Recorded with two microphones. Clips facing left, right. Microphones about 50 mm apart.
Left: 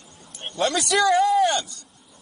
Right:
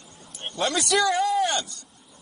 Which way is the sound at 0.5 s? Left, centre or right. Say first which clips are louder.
Left 2 dB; centre.